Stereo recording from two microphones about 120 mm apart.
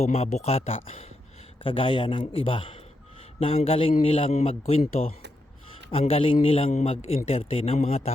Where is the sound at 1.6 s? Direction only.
45° left (ahead or behind).